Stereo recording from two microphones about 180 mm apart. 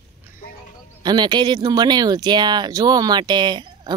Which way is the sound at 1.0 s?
25° right (ahead or behind).